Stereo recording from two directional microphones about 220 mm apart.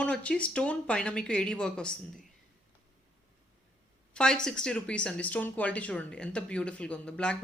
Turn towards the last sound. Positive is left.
turn(degrees=5)  # may be behind; listen again after turning